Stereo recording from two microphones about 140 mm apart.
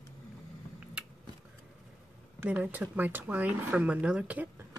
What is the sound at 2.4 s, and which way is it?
Speech, 10° right (ahead or behind).